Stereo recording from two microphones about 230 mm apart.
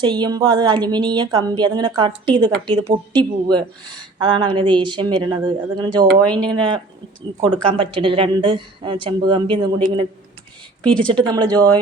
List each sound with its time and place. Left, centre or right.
0.0 s a woman's voice: centre
6.2 s speech: centre
6.5 s a woman's voice: right
10.8 s speech: centre
11.1 s speech: centre